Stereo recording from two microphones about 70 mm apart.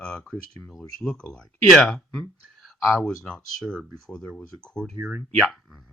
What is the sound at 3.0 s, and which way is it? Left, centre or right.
Speech, centre.